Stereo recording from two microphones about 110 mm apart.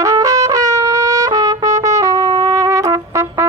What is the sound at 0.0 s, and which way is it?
Trumpet, 30° right (ahead or behind).